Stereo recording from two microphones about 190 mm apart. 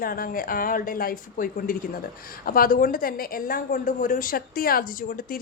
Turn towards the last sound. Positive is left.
turn(degrees=45)  # may be behind; listen again after turning